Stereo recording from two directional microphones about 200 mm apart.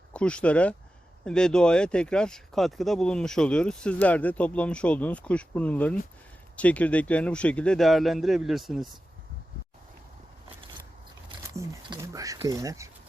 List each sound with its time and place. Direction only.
0.1 s speech: 5° left (ahead or behind)
11.5 s speech: 15° right (ahead or behind)